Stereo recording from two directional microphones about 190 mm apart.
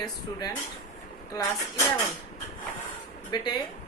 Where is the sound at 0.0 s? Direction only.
20° left (ahead or behind).